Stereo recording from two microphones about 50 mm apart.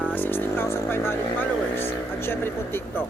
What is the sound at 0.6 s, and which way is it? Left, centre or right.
Speech, left.